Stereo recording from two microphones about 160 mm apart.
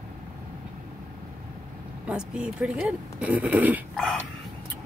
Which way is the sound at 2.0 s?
5° right (ahead or behind).